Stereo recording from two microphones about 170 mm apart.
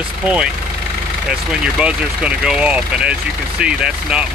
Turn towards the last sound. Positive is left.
turn(degrees=-5)  # may be behind; listen again after turning